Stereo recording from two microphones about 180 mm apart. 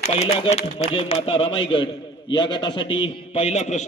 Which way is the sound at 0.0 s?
35° left (ahead or behind).